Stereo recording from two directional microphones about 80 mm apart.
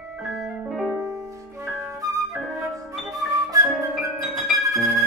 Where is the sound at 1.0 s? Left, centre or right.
Right.